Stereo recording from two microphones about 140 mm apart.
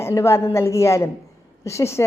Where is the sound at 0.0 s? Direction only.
20° left (ahead or behind).